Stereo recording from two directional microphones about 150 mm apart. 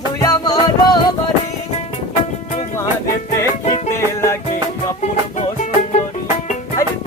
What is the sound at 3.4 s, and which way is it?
Music, 20° left (ahead or behind).